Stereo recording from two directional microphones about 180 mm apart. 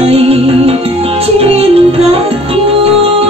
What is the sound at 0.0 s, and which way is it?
Music, 35° right (ahead or behind).